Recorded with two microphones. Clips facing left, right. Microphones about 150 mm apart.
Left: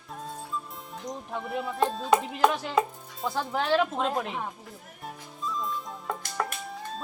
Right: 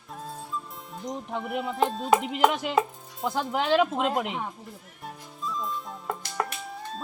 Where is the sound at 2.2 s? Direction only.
15° right (ahead or behind).